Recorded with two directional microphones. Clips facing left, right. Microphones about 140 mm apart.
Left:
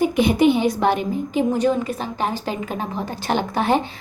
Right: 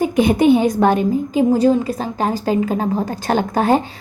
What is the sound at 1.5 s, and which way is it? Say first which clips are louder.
A woman's voice: right 5 dB; 35° right (ahead or behind).